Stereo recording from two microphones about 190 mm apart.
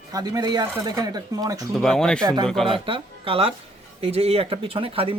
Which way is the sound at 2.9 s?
30° right (ahead or behind).